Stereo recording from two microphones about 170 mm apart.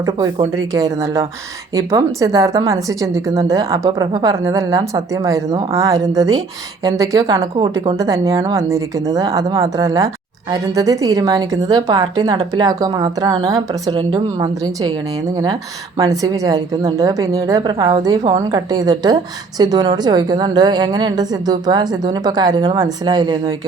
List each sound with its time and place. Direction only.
0.3 s a woman's voice: 20° right (ahead or behind)
16.0 s a woman's voice: 20° right (ahead or behind)